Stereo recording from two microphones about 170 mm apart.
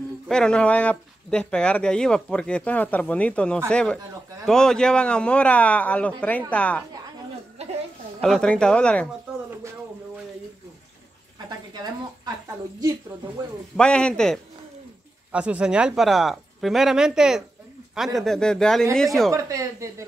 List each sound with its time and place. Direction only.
0.3 s speech: 5° left (ahead or behind)
8.2 s speech: 5° left (ahead or behind)
11.3 s a sound: 25° right (ahead or behind)
13.7 s speech: 5° left (ahead or behind)
15.3 s speech: 5° right (ahead or behind)
19.3 s speech: 20° right (ahead or behind)